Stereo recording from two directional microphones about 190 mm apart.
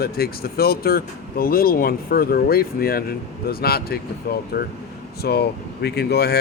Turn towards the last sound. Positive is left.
turn(degrees=60)  # may be behind; listen again after turning